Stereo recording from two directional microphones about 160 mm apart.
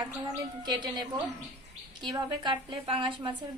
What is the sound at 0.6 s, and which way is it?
Speech, 25° right (ahead or behind).